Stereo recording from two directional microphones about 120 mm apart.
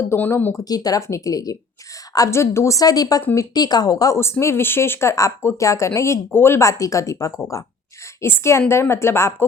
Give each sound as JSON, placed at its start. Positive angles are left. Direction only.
{"t": 0.1, "sound": "speech", "side_deg": 20}
{"t": 0.6, "sound": "speech", "side_deg": 30}